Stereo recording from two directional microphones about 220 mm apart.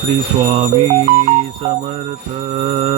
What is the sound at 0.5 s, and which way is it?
Mantra, 25° right (ahead or behind).